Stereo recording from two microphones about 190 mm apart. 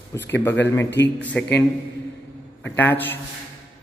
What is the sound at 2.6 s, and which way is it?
Speech, 10° left (ahead or behind).